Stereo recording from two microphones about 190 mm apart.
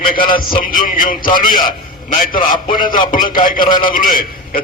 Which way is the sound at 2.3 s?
25° left (ahead or behind).